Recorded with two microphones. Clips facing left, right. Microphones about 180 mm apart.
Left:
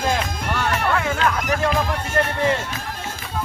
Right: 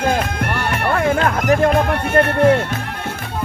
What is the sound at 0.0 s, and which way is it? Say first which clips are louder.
Music: right 4 dB; 60° right (ahead or behind).